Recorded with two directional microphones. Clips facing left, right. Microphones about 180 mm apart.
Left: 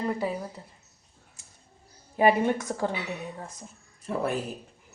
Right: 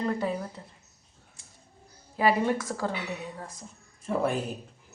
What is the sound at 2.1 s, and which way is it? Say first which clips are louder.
Speech: left 2 dB; 20° left (ahead or behind).